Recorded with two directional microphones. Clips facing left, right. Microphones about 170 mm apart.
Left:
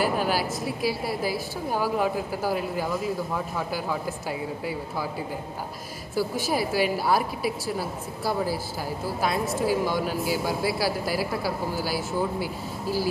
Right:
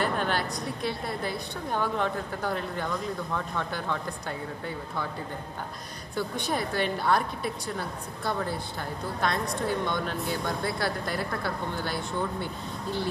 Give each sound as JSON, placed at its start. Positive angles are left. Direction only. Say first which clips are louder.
{"t": 0.0, "sound": "speech", "louder": "left 3 dB", "side_deg": 5}
{"t": 6.1, "sound": "speech", "louder": "left 4 dB", "side_deg": 5}